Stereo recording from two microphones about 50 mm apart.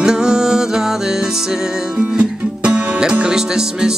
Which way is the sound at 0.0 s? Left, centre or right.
Centre.